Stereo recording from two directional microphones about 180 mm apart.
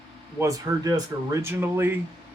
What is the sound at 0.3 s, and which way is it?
A man's voice, 20° right (ahead or behind).